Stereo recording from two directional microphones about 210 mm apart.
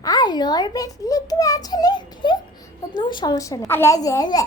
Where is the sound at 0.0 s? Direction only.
20° left (ahead or behind).